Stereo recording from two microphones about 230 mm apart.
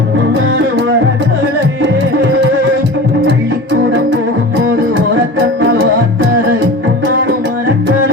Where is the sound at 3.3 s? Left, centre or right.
Right.